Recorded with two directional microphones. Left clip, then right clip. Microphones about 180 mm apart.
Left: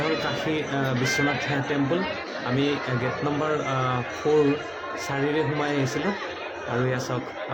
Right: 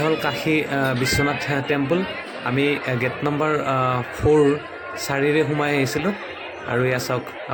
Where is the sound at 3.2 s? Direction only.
25° right (ahead or behind).